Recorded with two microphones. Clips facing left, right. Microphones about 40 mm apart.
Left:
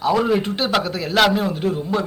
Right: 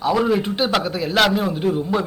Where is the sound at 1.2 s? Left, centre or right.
Centre.